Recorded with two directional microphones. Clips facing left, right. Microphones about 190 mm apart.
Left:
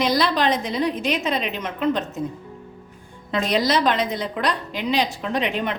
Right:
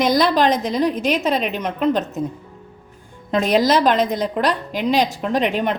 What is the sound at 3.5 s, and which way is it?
A woman's voice, 45° right (ahead or behind).